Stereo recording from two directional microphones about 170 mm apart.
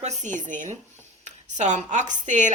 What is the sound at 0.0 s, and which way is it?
A woman's voice, 45° right (ahead or behind).